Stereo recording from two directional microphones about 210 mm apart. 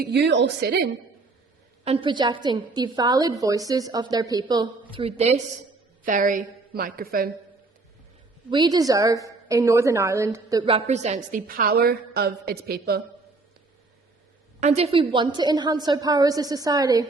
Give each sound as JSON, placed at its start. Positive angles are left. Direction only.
{"t": 0.0, "sound": "a woman's voice", "side_deg": -50}
{"t": 1.8, "sound": "a woman's voice", "side_deg": -25}
{"t": 8.4, "sound": "a woman's voice", "side_deg": -20}
{"t": 14.6, "sound": "a woman's voice", "side_deg": -30}